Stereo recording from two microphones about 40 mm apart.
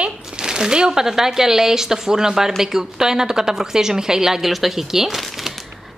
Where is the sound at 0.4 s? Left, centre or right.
Centre.